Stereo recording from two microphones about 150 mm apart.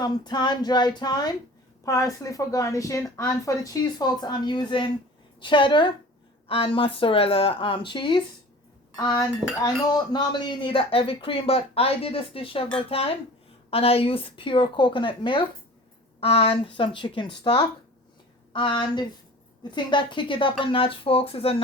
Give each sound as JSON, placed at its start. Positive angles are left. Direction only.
{"t": 0.0, "sound": "speech", "side_deg": 30}